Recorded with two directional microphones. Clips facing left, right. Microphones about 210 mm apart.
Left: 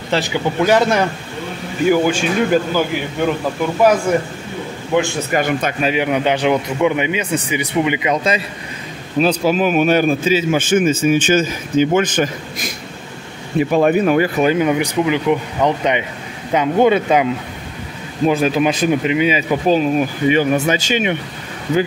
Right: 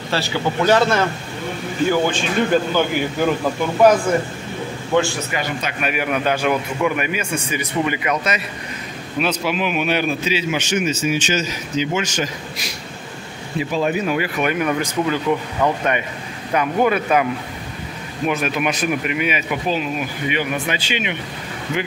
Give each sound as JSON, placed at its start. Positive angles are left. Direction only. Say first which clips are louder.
{"t": 0.1, "sound": "a man's voice", "louder": "left 3 dB", "side_deg": 15}
{"t": 4.9, "sound": "a man's voice", "louder": "left 1 dB", "side_deg": 10}
{"t": 5.3, "sound": "a man's voice", "louder": "left 7 dB", "side_deg": 50}
{"t": 5.8, "sound": "a man's voice", "louder": "left 2 dB", "side_deg": 25}
{"t": 9.2, "sound": "a man's voice", "louder": "left 6 dB", "side_deg": 40}
{"t": 14.4, "sound": "a man's voice", "louder": "left 6 dB", "side_deg": 30}
{"t": 14.7, "sound": "a man's voice", "louder": "left 4 dB", "side_deg": 15}
{"t": 19.7, "sound": "a man's voice", "louder": "left 10 dB", "side_deg": 40}